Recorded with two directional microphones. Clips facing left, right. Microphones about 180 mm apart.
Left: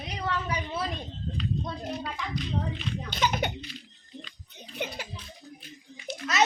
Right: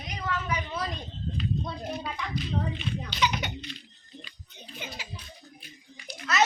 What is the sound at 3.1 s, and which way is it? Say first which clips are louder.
Speech: left 2 dB; 50° left (ahead or behind).